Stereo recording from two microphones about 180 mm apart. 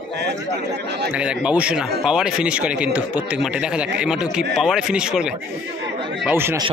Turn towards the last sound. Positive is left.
turn(degrees=-10)  # may be behind; listen again after turning